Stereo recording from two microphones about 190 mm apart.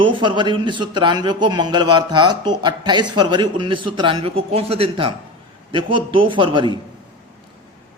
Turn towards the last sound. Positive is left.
turn(degrees=-25)  # may be behind; listen again after turning